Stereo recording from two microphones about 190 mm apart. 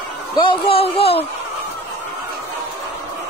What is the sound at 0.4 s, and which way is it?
Speech, 25° left (ahead or behind).